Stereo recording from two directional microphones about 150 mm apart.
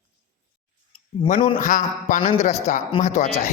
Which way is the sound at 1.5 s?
60° left (ahead or behind).